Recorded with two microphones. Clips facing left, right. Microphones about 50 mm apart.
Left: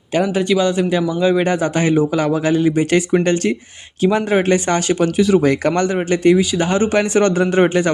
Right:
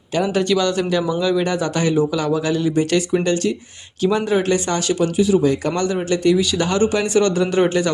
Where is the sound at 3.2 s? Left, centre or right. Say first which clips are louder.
Left 2 dB; left.